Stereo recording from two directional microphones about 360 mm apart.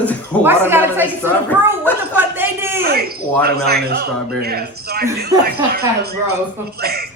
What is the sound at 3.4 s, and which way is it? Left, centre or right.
A man's voice, right.